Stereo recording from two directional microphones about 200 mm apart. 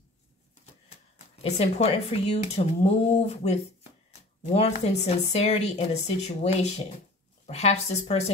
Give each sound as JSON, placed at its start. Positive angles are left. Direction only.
{"t": 1.1, "sound": "speech", "side_deg": 30}